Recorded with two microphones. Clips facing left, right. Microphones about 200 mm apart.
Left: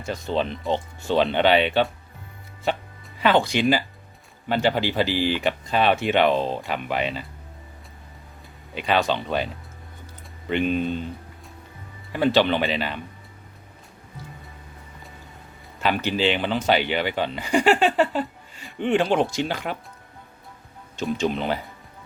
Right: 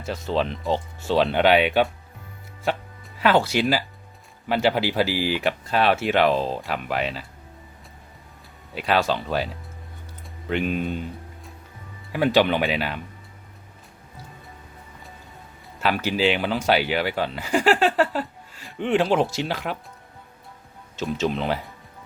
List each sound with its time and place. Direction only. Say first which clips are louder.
0.0 s speech: even; centre (ahead or behind)
3.2 s speech: even; 5° right (ahead or behind)
8.7 s speech: even; 5° right (ahead or behind)
10.5 s speech: left 2 dB; 5° right (ahead or behind)
12.1 s speech: even; 10° right (ahead or behind)
15.8 s speech: even; 5° right (ahead or behind)
20.9 s speech: left 1 dB; centre (ahead or behind)